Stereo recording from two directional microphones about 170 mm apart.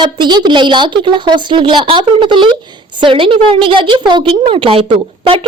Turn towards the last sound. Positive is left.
turn(degrees=-30)  # may be behind; listen again after turning